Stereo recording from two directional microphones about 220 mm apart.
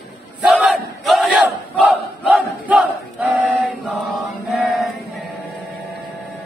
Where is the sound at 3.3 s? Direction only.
5° right (ahead or behind).